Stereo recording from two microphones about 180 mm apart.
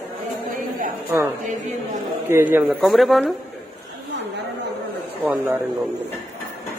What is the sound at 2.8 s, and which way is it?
Speech, centre (ahead or behind).